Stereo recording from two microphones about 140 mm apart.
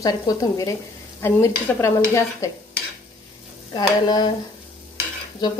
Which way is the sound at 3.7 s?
30° left (ahead or behind).